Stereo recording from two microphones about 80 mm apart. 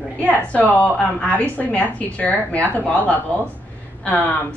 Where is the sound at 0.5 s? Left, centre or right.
Centre.